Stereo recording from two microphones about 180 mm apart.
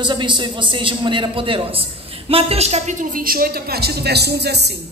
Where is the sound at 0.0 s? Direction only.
25° right (ahead or behind).